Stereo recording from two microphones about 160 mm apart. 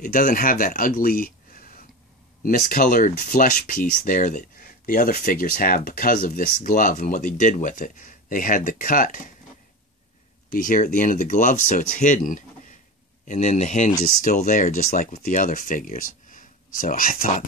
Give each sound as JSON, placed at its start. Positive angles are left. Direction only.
{"t": 0.0, "sound": "speech", "side_deg": 60}
{"t": 10.5, "sound": "speech", "side_deg": 55}